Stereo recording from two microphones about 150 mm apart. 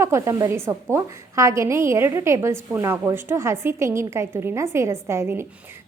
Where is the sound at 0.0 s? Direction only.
20° right (ahead or behind).